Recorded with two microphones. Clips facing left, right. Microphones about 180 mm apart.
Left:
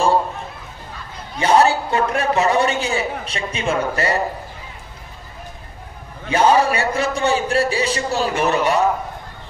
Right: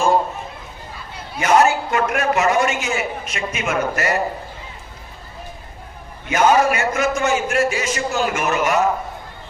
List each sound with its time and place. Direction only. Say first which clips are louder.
1.4 s a man's voice: even; 35° left (ahead or behind)
6.2 s a man's voice: even; 30° left (ahead or behind)